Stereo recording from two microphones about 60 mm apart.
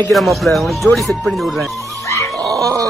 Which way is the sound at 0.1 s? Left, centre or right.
Centre.